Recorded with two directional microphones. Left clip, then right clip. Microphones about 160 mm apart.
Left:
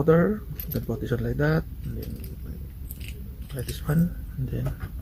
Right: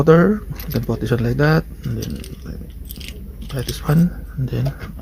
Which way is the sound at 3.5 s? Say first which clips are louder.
Right 9 dB; 25° right (ahead or behind).